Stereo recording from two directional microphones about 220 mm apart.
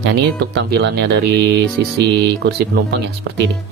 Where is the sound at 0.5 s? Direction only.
50° right (ahead or behind).